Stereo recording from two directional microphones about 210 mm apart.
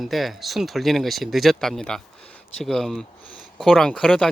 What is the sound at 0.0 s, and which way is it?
Speech, centre (ahead or behind).